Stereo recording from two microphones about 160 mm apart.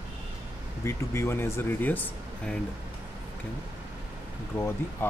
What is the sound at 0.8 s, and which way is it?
Speech, 15° left (ahead or behind).